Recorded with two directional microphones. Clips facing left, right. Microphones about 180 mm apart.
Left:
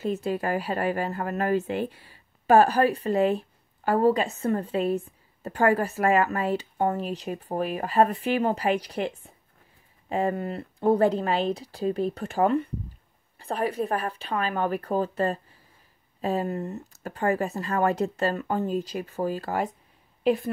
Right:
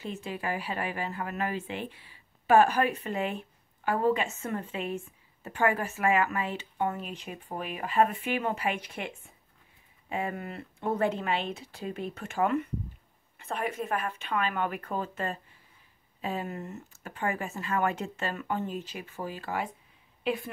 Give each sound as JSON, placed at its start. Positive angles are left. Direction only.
{"t": 0.0, "sound": "speech", "side_deg": 40}